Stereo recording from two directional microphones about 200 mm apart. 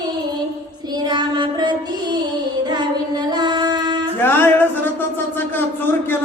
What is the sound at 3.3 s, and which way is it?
Female singing, 20° right (ahead or behind).